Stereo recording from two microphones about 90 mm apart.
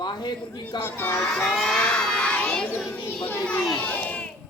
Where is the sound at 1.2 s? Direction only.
Centre (ahead or behind).